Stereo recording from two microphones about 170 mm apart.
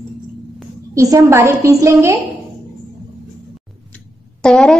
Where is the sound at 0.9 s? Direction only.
20° right (ahead or behind).